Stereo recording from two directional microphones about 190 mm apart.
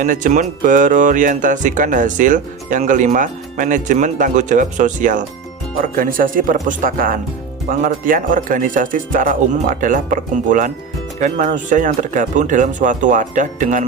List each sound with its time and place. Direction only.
0.0 s speech: 40° right (ahead or behind)